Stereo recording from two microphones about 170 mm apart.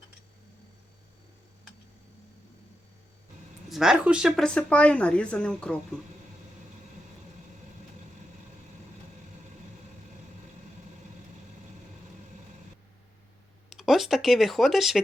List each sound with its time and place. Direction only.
3.7 s speech: centre (ahead or behind)
13.7 s speech: centre (ahead or behind)